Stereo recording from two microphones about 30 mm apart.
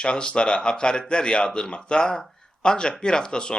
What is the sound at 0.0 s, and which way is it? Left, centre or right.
Speech, left.